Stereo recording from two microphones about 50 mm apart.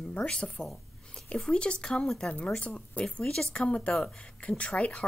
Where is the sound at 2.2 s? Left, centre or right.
Left.